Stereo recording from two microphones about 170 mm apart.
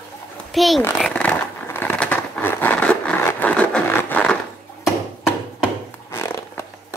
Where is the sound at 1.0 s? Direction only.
5° left (ahead or behind).